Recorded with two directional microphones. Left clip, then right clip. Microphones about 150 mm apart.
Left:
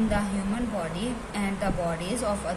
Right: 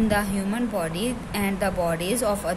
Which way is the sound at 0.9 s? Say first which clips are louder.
Right 4 dB; 65° right (ahead or behind).